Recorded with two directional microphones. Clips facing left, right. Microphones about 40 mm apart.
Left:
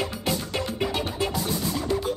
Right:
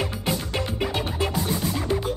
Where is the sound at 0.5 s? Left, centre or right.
Right.